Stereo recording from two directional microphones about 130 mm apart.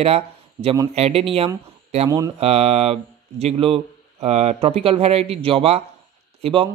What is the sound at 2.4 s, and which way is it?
Speech, 50° right (ahead or behind).